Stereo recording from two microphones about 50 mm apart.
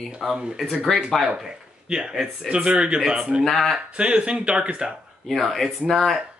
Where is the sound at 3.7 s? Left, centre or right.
Right.